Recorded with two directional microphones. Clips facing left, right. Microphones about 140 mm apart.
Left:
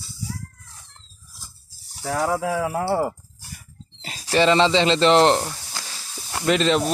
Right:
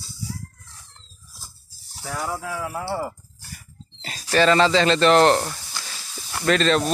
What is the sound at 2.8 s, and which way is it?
Speech, 60° left (ahead or behind).